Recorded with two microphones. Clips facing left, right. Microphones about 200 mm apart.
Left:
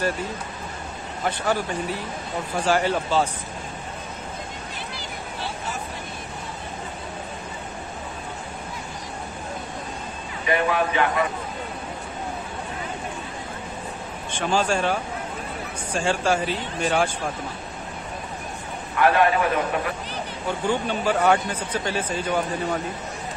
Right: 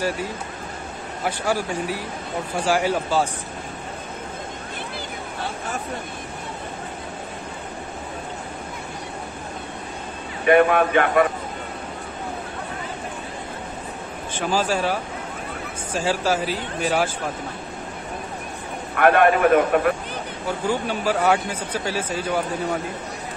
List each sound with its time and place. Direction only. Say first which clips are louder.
1.2 s a man's voice: even; 10° right (ahead or behind)
10.4 s speech: right 7 dB; 55° right (ahead or behind)
14.4 s speech: even; 5° right (ahead or behind)
18.9 s speech: right 3 dB; 55° right (ahead or behind)
20.4 s a man's voice: even; 5° right (ahead or behind)